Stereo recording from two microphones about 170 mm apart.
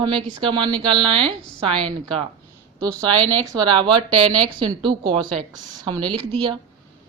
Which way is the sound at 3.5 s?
25° right (ahead or behind).